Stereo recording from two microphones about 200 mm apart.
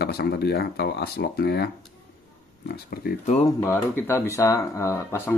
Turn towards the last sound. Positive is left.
turn(degrees=15)  # may be behind; listen again after turning